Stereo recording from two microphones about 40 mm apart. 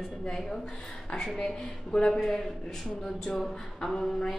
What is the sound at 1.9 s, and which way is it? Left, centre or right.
Speech, centre.